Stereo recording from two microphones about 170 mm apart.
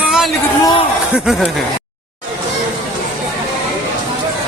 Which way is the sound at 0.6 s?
25° left (ahead or behind).